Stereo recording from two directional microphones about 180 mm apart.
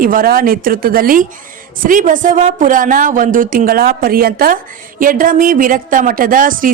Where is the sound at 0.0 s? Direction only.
50° right (ahead or behind).